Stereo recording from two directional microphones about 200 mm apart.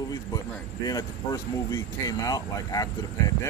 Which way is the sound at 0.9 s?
20° left (ahead or behind).